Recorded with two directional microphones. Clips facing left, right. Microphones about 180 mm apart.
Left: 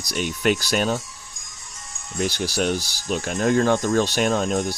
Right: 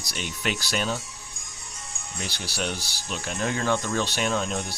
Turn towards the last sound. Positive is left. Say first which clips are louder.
# left 6 dB
turn(degrees=45)  # may be behind; listen again after turning